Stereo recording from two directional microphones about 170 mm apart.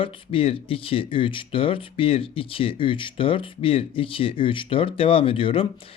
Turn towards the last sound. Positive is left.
turn(degrees=30)  # may be behind; listen again after turning